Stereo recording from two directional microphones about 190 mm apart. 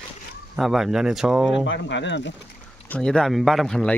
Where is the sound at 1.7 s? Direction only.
70° left (ahead or behind).